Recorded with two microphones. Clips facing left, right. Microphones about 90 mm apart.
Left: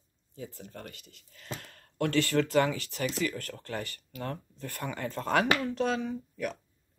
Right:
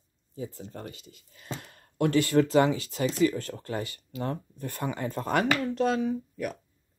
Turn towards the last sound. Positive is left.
turn(degrees=-5)  # may be behind; listen again after turning